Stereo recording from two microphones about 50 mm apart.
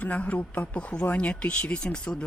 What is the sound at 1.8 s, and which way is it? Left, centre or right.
Speech, centre.